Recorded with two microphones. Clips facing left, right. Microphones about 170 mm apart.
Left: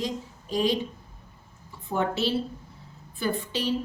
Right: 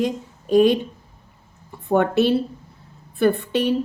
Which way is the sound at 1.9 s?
60° right (ahead or behind).